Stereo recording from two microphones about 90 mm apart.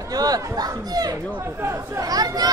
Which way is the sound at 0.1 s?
45° right (ahead or behind).